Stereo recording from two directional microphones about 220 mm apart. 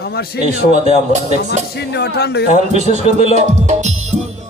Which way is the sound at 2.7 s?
30° right (ahead or behind).